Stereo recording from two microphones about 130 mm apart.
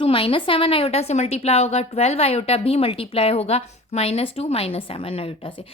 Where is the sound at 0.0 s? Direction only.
45° left (ahead or behind).